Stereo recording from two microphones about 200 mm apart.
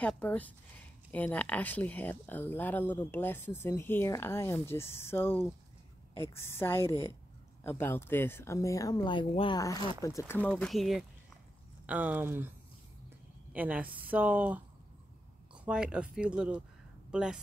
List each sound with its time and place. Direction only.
0.0 s speech: 5° left (ahead or behind)
10.6 s speech: centre (ahead or behind)
13.5 s speech: 5° right (ahead or behind)